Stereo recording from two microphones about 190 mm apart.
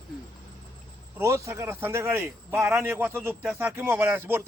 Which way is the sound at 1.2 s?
15° right (ahead or behind).